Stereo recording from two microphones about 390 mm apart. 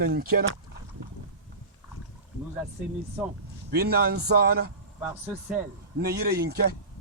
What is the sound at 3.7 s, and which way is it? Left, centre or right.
Speech, right.